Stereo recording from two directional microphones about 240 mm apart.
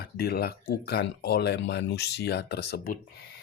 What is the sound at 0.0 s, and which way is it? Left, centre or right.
Speech, left.